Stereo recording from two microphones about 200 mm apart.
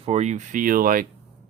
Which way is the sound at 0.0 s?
35° right (ahead or behind).